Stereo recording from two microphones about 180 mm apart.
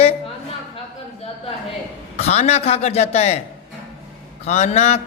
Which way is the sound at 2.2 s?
35° left (ahead or behind).